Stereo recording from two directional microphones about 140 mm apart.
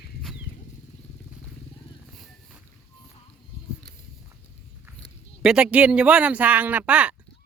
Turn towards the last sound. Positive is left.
turn(degrees=-10)  # may be behind; listen again after turning